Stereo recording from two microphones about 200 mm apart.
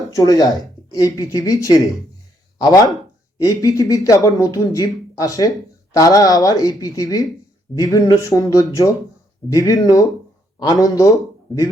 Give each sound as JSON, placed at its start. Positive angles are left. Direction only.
{"t": 0.1, "sound": "speech", "side_deg": 20}